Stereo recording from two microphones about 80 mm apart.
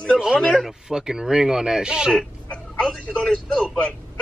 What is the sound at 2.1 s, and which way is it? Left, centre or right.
Speech, centre.